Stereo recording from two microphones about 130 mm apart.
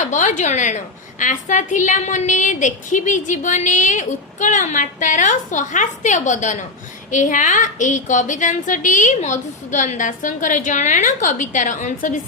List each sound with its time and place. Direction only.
0.0 s a woman's voice: 70° left (ahead or behind)
1.2 s a woman's voice: 75° left (ahead or behind)